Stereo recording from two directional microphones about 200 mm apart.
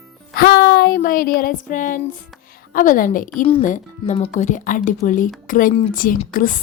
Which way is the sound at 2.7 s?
40° left (ahead or behind).